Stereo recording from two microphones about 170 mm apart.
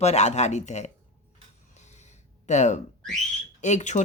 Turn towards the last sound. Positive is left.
turn(degrees=45)  # may be behind; listen again after turning